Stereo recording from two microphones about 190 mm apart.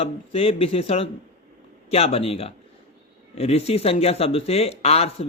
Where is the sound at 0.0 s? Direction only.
30° left (ahead or behind).